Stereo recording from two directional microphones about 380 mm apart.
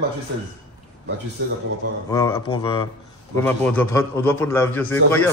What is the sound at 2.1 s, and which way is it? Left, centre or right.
A man's voice, centre.